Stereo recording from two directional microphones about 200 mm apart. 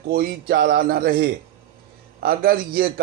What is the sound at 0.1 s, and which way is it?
Speech, 50° right (ahead or behind).